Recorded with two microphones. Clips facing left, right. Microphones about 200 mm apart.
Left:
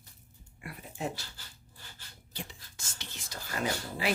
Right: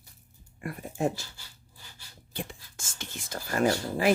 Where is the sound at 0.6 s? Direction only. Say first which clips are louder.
Right 8 dB; 45° right (ahead or behind).